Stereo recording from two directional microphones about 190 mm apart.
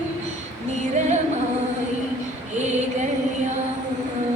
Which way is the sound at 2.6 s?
35° right (ahead or behind).